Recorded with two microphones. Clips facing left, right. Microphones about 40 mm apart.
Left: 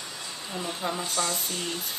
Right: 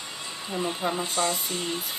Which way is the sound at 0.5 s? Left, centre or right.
Right.